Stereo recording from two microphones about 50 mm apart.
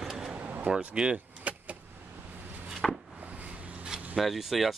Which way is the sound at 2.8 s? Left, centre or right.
Centre.